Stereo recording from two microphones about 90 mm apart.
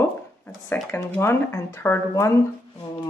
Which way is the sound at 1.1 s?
30° left (ahead or behind).